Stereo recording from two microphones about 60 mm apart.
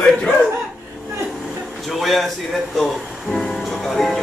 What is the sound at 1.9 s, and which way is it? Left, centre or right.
Music, centre.